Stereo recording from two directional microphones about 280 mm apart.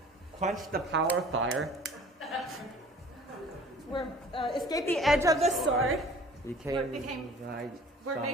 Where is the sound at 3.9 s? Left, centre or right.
Centre.